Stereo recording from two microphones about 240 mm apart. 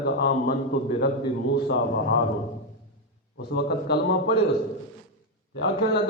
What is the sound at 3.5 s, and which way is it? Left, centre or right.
Speech, left.